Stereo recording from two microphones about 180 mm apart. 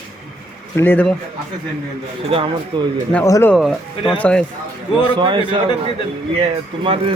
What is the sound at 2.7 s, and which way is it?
Speech, 25° right (ahead or behind).